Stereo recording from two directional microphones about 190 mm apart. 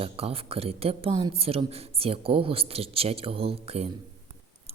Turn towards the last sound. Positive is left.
turn(degrees=-30)  # may be behind; listen again after turning